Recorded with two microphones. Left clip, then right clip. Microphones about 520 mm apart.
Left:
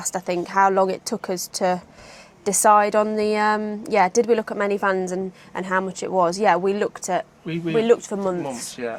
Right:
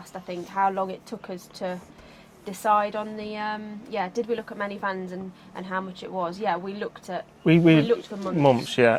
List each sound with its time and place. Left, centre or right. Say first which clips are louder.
0.1 s a woman's voice: left 9 dB; left
7.4 s speech: right 2 dB; right